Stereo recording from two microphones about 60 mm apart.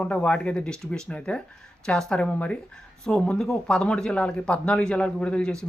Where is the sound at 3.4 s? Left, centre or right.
Centre.